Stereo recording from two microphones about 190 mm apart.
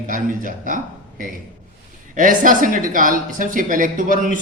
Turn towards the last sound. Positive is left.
turn(degrees=-45)  # may be behind; listen again after turning